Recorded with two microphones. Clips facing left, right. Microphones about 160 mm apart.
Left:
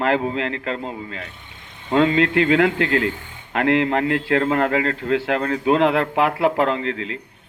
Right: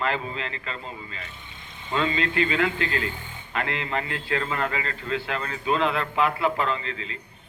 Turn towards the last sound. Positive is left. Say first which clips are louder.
# left 7 dB
turn(degrees=70)  # may be behind; listen again after turning